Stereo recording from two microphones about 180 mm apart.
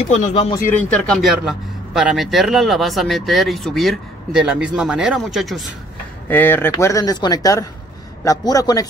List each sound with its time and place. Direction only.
0.1 s speech: 40° left (ahead or behind)
0.8 s speech: 5° left (ahead or behind)
6.2 s a man's voice: 10° left (ahead or behind)